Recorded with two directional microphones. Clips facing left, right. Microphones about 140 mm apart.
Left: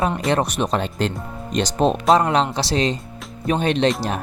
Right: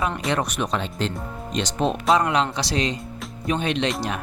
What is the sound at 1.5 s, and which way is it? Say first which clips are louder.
Speech: left 5 dB; 35° left (ahead or behind).